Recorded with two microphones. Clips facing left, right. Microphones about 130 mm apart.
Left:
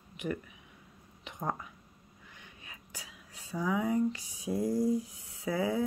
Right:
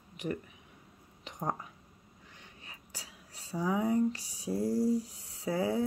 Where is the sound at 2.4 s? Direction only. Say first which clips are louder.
Even; 35° right (ahead or behind).